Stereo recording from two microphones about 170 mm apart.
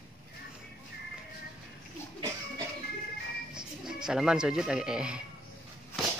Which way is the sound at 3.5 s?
5° right (ahead or behind).